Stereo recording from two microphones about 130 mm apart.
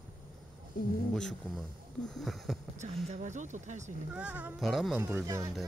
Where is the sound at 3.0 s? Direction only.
70° right (ahead or behind).